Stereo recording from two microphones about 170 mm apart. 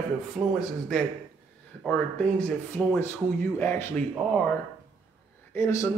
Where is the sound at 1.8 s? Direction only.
5° left (ahead or behind).